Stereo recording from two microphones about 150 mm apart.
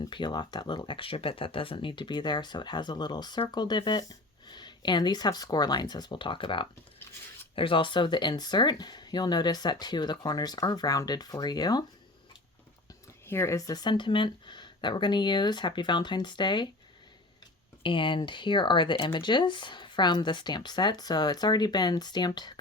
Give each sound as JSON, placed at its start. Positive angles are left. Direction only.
{"t": 0.0, "sound": "speech", "side_deg": 30}
{"t": 13.2, "sound": "speech", "side_deg": 15}
{"t": 17.8, "sound": "speech", "side_deg": 35}